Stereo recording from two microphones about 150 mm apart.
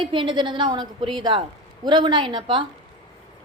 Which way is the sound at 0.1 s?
35° right (ahead or behind).